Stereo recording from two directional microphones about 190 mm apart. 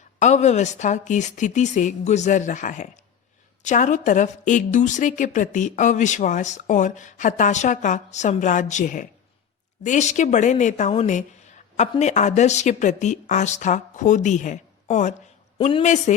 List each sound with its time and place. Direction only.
0.2 s a woman's voice: 35° left (ahead or behind)